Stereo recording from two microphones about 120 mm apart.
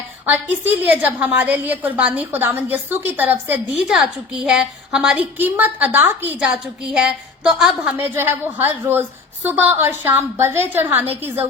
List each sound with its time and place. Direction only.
0.6 s a woman's voice: 15° right (ahead or behind)